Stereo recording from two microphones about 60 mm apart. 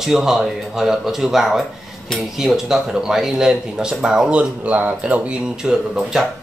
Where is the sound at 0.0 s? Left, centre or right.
Centre.